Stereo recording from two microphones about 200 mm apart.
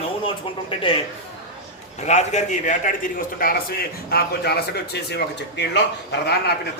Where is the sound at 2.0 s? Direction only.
35° left (ahead or behind); by 5.7 s 60° left (ahead or behind).